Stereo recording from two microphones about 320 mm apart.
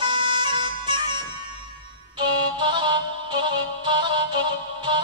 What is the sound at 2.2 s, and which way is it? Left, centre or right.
Music, centre.